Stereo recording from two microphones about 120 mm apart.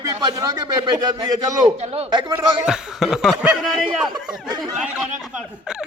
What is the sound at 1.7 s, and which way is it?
Speech, 60° right (ahead or behind).